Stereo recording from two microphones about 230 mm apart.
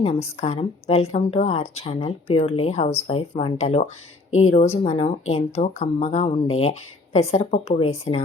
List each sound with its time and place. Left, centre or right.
0.3 s speech: left